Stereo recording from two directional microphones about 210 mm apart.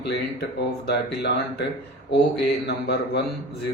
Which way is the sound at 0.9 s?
55° left (ahead or behind).